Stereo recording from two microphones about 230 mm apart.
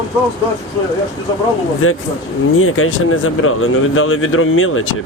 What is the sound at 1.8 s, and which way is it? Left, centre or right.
Speech, left.